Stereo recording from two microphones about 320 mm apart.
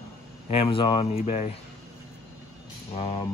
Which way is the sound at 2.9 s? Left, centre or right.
Centre.